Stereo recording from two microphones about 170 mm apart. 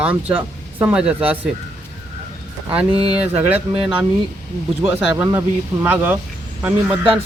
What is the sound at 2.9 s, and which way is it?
Speech, 35° right (ahead or behind).